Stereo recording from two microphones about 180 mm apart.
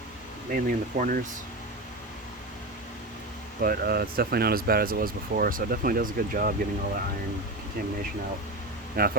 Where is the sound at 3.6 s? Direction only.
60° right (ahead or behind).